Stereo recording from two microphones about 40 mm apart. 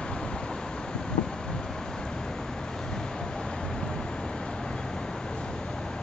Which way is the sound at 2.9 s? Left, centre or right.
Centre.